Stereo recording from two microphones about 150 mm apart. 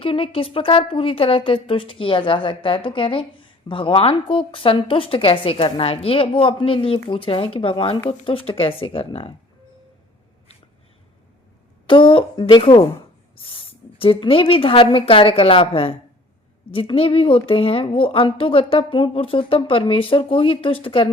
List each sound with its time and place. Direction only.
0.0 s a woman's voice: 35° left (ahead or behind)
11.9 s a woman's voice: 35° left (ahead or behind)